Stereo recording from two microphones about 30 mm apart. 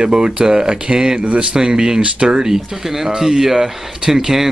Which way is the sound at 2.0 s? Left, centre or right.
Right.